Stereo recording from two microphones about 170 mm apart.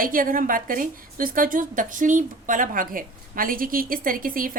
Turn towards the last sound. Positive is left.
turn(degrees=-55)  # may be behind; listen again after turning